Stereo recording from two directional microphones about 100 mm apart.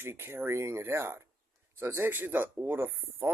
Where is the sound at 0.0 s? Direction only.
25° right (ahead or behind).